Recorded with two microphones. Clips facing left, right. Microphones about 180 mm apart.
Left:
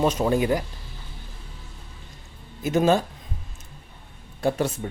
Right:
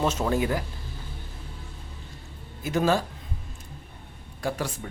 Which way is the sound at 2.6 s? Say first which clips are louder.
Left 4 dB; 20° left (ahead or behind).